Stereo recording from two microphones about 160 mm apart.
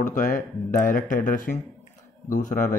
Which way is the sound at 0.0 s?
55° left (ahead or behind).